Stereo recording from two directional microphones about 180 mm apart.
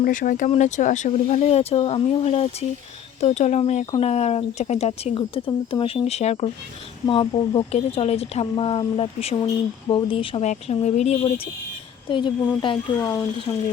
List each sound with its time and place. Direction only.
0.0 s speech: 50° left (ahead or behind)
12.0 s speech: 25° left (ahead or behind)